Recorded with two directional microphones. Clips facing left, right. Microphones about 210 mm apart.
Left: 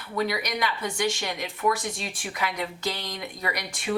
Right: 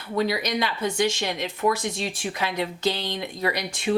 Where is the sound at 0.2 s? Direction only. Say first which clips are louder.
Right 3 dB; 25° right (ahead or behind).